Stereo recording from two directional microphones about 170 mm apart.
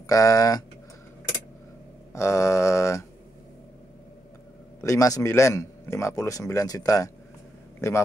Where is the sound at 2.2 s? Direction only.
20° left (ahead or behind).